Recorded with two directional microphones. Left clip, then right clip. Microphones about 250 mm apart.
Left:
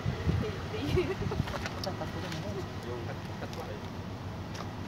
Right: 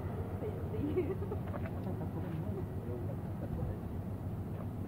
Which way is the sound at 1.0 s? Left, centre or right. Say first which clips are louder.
Left 5 dB; left.